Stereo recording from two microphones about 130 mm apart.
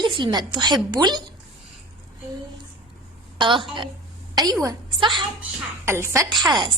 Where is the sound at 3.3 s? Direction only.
40° right (ahead or behind).